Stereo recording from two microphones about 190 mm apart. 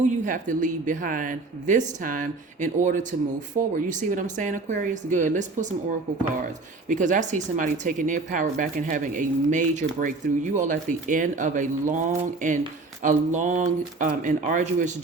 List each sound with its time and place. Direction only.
0.0 s speech: 40° right (ahead or behind)
6.8 s speech: 40° right (ahead or behind)